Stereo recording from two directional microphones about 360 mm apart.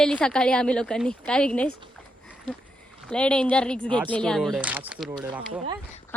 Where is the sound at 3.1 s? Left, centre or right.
Centre.